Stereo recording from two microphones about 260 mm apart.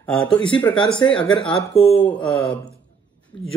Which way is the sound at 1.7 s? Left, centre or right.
Left.